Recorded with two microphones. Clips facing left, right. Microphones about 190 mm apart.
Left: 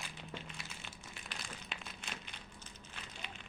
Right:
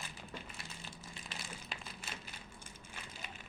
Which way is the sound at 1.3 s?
Centre (ahead or behind).